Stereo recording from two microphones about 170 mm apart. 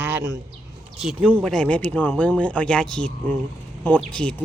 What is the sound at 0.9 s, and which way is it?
Speech, centre (ahead or behind).